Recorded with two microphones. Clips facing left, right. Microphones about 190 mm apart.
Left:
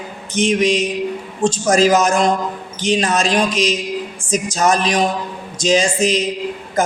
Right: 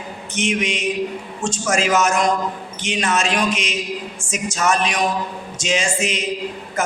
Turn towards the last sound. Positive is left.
turn(degrees=35)  # may be behind; listen again after turning